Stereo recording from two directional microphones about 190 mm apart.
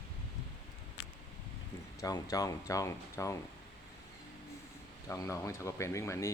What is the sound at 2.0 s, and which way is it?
Speech, 20° left (ahead or behind).